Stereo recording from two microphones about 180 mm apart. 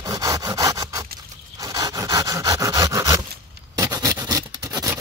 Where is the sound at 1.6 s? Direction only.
20° right (ahead or behind).